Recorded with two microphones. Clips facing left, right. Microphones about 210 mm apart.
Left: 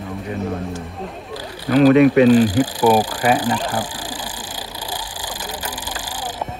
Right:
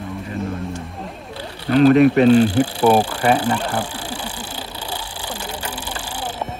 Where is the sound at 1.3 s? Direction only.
40° left (ahead or behind).